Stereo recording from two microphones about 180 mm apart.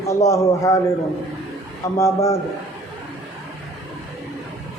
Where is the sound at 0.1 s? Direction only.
15° left (ahead or behind).